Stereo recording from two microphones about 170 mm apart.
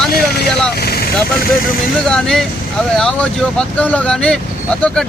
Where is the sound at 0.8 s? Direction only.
70° left (ahead or behind).